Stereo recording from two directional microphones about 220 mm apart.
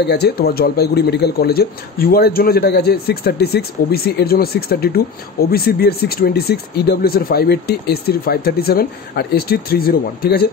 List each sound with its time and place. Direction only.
0.0 s speech: 50° left (ahead or behind)